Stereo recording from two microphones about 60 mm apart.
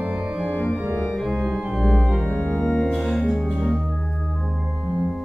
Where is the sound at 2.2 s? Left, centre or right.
Centre.